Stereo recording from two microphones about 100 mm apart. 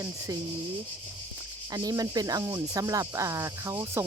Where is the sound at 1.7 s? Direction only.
40° right (ahead or behind).